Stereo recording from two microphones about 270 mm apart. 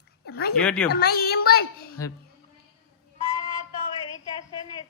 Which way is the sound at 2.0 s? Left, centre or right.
Centre.